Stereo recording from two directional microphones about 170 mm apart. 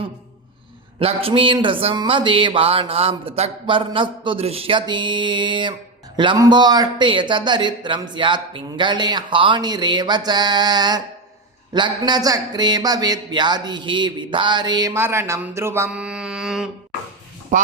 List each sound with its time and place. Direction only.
0.9 s speech: 35° right (ahead or behind); by 16.6 s 5° right (ahead or behind)
17.5 s speech: 45° right (ahead or behind)